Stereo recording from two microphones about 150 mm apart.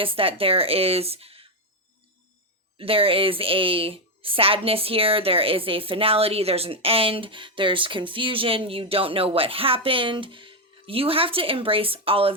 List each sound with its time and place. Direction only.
0.0 s a woman's voice: 35° right (ahead or behind)
2.7 s a woman's voice: 40° right (ahead or behind)